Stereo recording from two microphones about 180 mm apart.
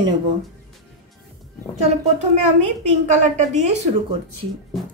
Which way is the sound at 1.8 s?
35° right (ahead or behind).